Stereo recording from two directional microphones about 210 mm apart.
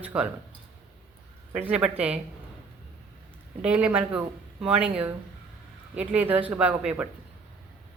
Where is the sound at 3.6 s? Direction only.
5° right (ahead or behind).